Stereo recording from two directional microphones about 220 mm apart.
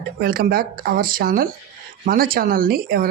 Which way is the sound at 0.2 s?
40° right (ahead or behind).